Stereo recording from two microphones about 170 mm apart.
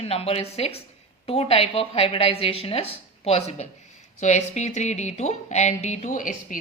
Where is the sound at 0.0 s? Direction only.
35° left (ahead or behind).